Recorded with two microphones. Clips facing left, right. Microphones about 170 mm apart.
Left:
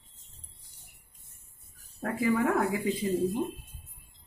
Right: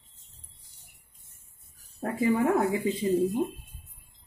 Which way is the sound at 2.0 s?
25° right (ahead or behind).